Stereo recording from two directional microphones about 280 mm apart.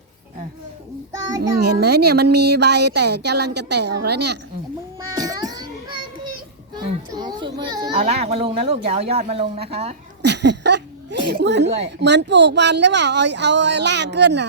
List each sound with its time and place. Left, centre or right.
1.8 s speech: right
5.1 s music: centre
6.0 s a sound: right
6.7 s a child's voice: centre
10.2 s speech: right